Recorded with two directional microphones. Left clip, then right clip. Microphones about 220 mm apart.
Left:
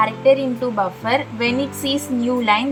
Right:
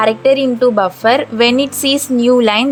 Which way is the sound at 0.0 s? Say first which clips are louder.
Right 4 dB; 45° right (ahead or behind).